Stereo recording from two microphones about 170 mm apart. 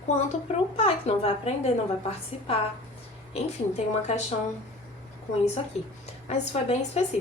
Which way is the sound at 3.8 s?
40° left (ahead or behind).